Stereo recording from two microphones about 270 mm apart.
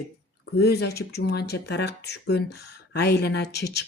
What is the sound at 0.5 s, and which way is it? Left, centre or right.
Speech, left.